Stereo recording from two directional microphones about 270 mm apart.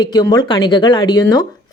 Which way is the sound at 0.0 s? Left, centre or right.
Centre.